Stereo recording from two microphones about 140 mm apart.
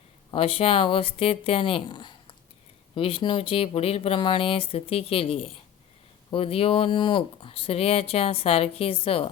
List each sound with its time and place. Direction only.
0.3 s speech: 40° left (ahead or behind)